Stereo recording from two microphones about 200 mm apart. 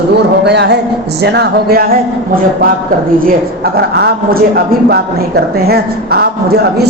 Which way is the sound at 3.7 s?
55° right (ahead or behind).